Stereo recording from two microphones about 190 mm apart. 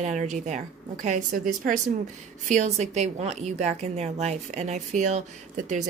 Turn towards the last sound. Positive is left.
turn(degrees=-40)  # may be behind; listen again after turning